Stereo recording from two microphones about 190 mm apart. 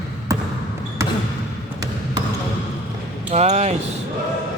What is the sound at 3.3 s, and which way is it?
Speech, 35° right (ahead or behind).